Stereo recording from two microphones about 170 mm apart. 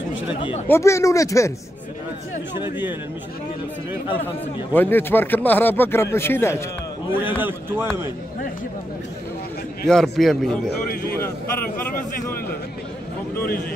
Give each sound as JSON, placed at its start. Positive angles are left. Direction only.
{"t": 0.3, "sound": "speech", "side_deg": 30}
{"t": 0.7, "sound": "speech", "side_deg": 15}
{"t": 2.6, "sound": "speech", "side_deg": -10}
{"t": 4.7, "sound": "speech", "side_deg": 10}
{"t": 7.2, "sound": "speech", "side_deg": -10}
{"t": 9.8, "sound": "a man's voice", "side_deg": 5}